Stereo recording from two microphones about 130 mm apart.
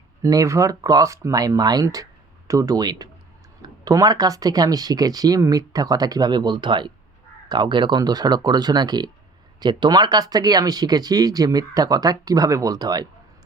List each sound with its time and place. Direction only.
0.2 s speech: 25° right (ahead or behind)